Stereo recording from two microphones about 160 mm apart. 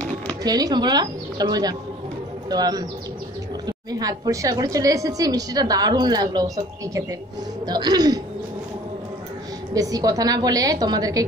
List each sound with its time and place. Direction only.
0.4 s a woman's voice: 25° right (ahead or behind)
9.8 s a woman's voice: 25° right (ahead or behind)